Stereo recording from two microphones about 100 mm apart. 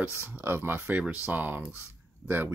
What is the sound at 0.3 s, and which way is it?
Speech, 20° right (ahead or behind).